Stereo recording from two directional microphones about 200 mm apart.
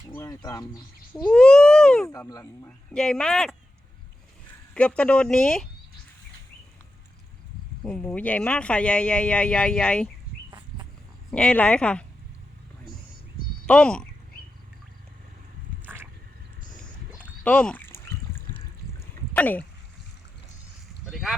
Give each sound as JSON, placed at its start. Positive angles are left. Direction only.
{"t": 0.2, "sound": "speech", "side_deg": 15}
{"t": 1.1, "sound": "speech", "side_deg": 5}
{"t": 2.1, "sound": "speech", "side_deg": 15}
{"t": 2.9, "sound": "speech", "side_deg": 5}
{"t": 4.7, "sound": "speech", "side_deg": 5}
{"t": 7.9, "sound": "speech", "side_deg": 5}
{"t": 11.3, "sound": "speech", "side_deg": 5}
{"t": 13.7, "sound": "speech", "side_deg": 5}
{"t": 17.4, "sound": "a sound", "side_deg": 5}
{"t": 21.1, "sound": "a sound", "side_deg": 0}